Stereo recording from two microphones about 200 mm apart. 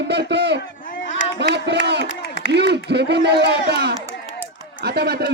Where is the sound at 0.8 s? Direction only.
40° left (ahead or behind).